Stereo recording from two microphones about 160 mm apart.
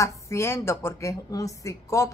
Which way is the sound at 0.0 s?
15° left (ahead or behind).